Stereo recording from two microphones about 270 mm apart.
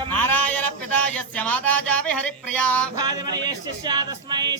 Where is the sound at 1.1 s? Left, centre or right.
Centre.